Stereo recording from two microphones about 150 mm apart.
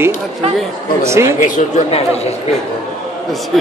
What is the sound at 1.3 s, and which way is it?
Speech, 55° left (ahead or behind).